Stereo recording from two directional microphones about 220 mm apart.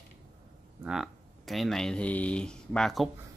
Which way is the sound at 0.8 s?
Centre (ahead or behind).